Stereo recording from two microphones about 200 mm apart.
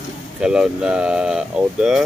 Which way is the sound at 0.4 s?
5° right (ahead or behind).